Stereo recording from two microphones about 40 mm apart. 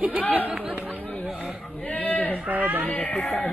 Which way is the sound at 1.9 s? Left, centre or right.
Left.